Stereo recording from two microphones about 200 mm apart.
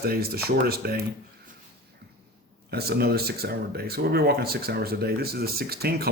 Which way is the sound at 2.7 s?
50° right (ahead or behind).